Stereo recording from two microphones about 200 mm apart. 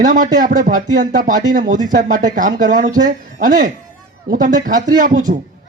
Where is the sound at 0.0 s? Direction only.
40° right (ahead or behind).